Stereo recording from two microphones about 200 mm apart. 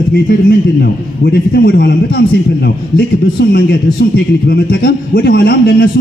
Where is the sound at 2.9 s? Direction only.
55° left (ahead or behind).